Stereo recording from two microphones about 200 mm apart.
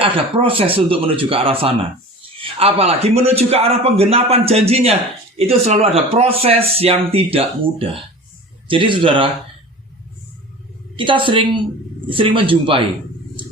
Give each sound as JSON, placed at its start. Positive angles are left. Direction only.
{"t": 0.0, "sound": "a man's voice", "side_deg": -25}
{"t": 10.9, "sound": "a man's voice", "side_deg": -25}